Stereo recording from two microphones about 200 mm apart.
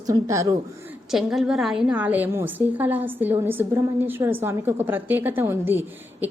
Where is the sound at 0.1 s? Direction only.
15° right (ahead or behind).